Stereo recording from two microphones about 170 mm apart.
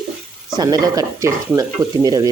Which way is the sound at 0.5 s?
25° right (ahead or behind).